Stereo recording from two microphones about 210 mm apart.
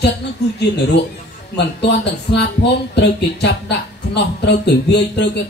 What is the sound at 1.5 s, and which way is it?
A man's voice, 55° left (ahead or behind).